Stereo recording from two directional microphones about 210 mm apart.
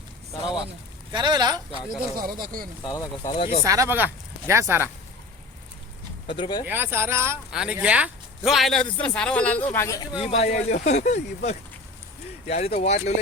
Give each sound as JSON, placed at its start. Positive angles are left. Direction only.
{"t": 1.1, "sound": "speech", "side_deg": -20}
{"t": 2.1, "sound": "speech", "side_deg": -45}
{"t": 2.8, "sound": "speech", "side_deg": 15}
{"t": 3.2, "sound": "speech", "side_deg": 30}
{"t": 3.6, "sound": "speech", "side_deg": -15}
{"t": 6.2, "sound": "speech", "side_deg": 25}
{"t": 6.7, "sound": "speech", "side_deg": -10}
{"t": 10.2, "sound": "speech", "side_deg": 30}